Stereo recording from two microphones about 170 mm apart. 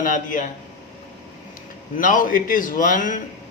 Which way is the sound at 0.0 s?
50° left (ahead or behind).